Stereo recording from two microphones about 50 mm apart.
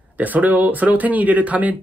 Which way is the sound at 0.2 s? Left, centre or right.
Right.